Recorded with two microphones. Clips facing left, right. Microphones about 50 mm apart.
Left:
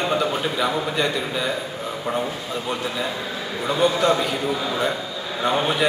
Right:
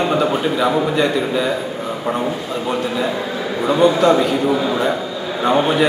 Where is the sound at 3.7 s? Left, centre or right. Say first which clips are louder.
Right 6 dB; centre.